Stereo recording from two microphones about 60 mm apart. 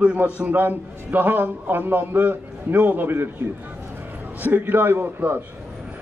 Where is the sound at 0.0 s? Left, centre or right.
Centre.